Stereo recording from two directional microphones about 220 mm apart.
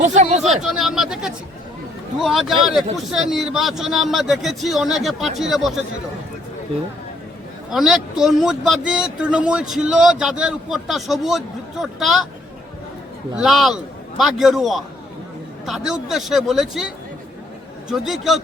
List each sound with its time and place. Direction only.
0.0 s speech: 30° right (ahead or behind)
0.4 s a man's voice: centre (ahead or behind)
7.7 s a man's voice: centre (ahead or behind)
13.3 s a man's voice: centre (ahead or behind)
17.8 s a man's voice: centre (ahead or behind)